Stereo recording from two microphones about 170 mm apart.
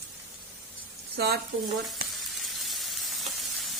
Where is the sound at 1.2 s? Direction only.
75° right (ahead or behind).